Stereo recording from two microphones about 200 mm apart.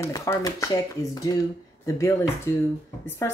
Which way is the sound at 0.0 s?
15° left (ahead or behind).